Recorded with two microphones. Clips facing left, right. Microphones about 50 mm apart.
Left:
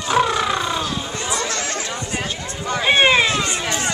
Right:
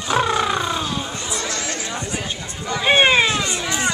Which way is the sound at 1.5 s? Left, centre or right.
Left.